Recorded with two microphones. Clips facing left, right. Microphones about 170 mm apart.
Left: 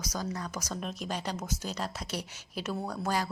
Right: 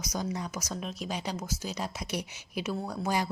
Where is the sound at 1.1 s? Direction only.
5° right (ahead or behind).